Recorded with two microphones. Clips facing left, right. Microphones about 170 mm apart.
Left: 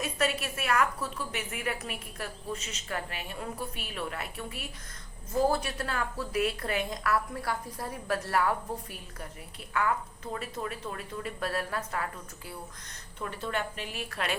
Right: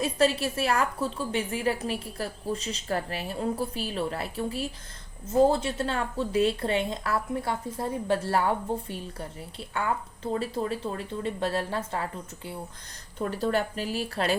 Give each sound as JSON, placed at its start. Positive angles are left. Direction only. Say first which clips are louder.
{"t": 0.0, "sound": "a woman's voice", "louder": "right 6 dB", "side_deg": -30}
{"t": 13.1, "sound": "a woman's voice", "louder": "right 7 dB", "side_deg": -40}